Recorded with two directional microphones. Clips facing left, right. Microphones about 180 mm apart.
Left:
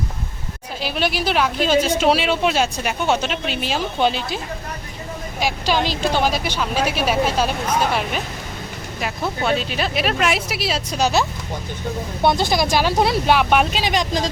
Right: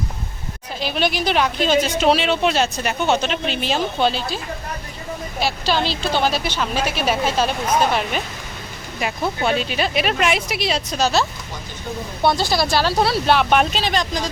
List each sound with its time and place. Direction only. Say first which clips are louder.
0.8 s speech: right 1 dB; 5° left (ahead or behind)
5.4 s speech: left 1 dB; 15° left (ahead or behind)
9.0 s speech: right 2 dB; centre (ahead or behind)
11.0 s speech: left 1 dB; 15° left (ahead or behind)